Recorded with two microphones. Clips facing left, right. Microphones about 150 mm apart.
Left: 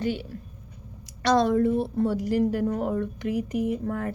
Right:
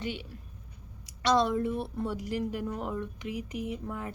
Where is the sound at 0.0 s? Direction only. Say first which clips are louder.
Left 8 dB; 40° left (ahead or behind).